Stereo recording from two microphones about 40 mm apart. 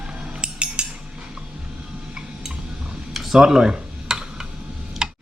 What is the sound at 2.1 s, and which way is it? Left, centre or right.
Tick-tock, centre.